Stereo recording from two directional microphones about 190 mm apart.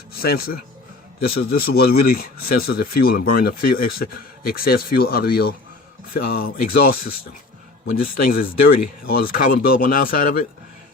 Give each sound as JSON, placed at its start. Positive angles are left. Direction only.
{"t": 0.2, "sound": "speech", "side_deg": 55}
{"t": 8.0, "sound": "speech", "side_deg": 50}